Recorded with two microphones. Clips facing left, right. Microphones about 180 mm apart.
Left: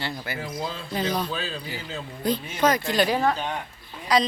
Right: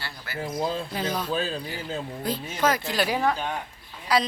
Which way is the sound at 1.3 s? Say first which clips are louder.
Right 3 dB; 50° right (ahead or behind).